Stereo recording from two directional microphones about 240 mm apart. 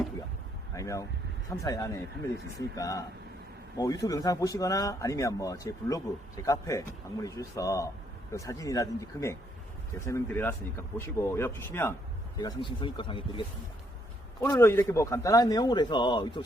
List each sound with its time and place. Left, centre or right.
0.7 s speech: centre
14.4 s speech: centre